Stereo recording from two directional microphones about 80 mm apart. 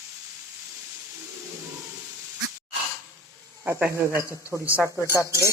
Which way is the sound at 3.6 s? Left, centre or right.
Centre.